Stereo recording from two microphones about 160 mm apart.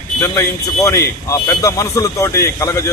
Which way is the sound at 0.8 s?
20° left (ahead or behind).